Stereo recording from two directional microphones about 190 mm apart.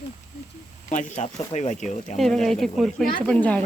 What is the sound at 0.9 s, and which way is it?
Speech, 40° left (ahead or behind).